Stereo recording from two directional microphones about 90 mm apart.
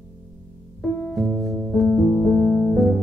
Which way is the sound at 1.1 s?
Centre (ahead or behind).